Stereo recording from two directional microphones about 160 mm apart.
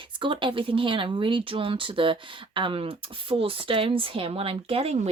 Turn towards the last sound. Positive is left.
turn(degrees=-40)  # may be behind; listen again after turning